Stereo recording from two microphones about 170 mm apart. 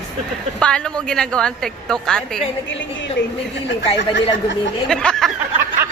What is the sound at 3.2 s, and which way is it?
Speech, 90° left.